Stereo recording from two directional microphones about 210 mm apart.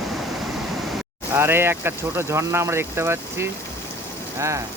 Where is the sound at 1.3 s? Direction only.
10° right (ahead or behind).